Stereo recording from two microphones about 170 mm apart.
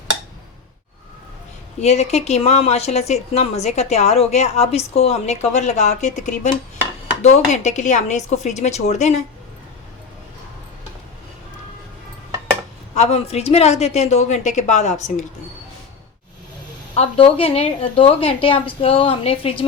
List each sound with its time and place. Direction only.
1.8 s speech: 40° left (ahead or behind)
12.9 s speech: 40° left (ahead or behind)
16.9 s speech: 35° left (ahead or behind)